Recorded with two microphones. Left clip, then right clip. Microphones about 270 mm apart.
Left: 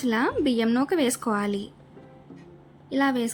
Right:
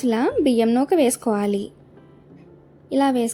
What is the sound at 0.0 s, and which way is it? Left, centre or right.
Speech, centre.